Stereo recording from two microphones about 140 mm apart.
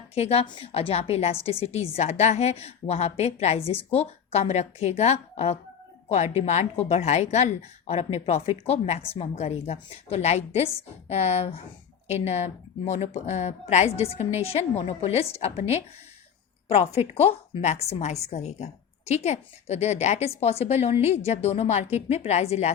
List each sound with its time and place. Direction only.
0.1 s a woman's voice: 45° left (ahead or behind)